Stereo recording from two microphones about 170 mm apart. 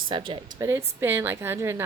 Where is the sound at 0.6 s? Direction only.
15° right (ahead or behind).